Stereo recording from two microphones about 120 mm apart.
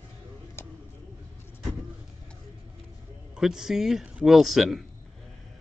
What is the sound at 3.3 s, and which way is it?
A man's voice, 5° right (ahead or behind).